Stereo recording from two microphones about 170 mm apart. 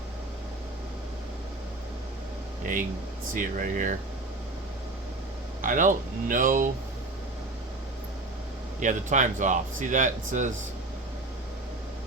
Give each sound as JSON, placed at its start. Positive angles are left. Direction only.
{"t": 3.3, "sound": "speech", "side_deg": -50}
{"t": 5.6, "sound": "speech", "side_deg": -50}
{"t": 8.8, "sound": "speech", "side_deg": -45}